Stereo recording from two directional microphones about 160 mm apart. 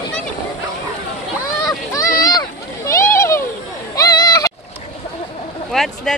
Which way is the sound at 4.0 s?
25° left (ahead or behind).